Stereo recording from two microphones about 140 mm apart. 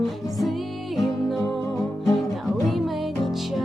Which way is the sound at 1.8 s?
20° left (ahead or behind).